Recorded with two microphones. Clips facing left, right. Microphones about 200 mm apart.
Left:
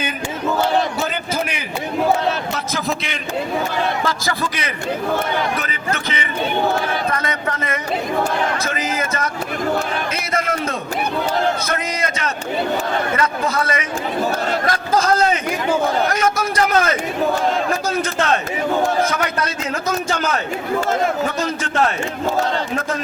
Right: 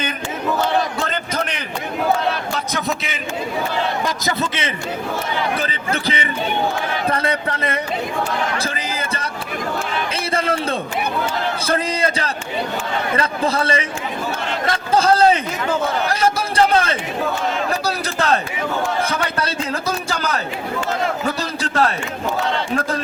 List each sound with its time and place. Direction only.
0.9 s a sound: 5° left (ahead or behind)
2.7 s a man's voice: centre (ahead or behind)
4.0 s a man's voice: 20° right (ahead or behind)
10.3 s a man's voice: 30° right (ahead or behind)